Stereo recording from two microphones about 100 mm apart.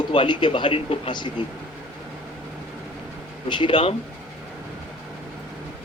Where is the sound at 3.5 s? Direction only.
55° left (ahead or behind).